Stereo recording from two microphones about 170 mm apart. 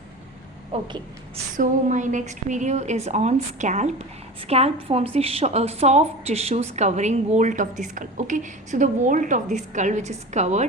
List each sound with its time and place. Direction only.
0.7 s a woman's voice: 35° right (ahead or behind)
1.5 s a woman's voice: 50° right (ahead or behind)